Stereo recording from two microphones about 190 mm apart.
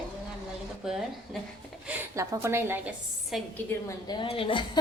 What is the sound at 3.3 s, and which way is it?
Speech, centre (ahead or behind).